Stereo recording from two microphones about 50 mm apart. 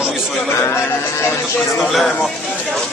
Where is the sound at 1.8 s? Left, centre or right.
Centre.